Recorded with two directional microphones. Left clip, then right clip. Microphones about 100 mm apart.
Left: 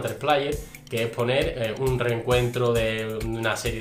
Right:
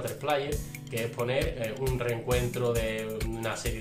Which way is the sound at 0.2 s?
20° left (ahead or behind).